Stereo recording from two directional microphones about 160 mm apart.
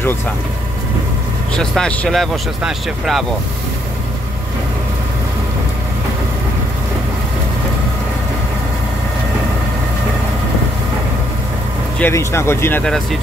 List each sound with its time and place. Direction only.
1.5 s speech: 5° left (ahead or behind)
12.0 s speech: 15° left (ahead or behind)
12.8 s speech: centre (ahead or behind)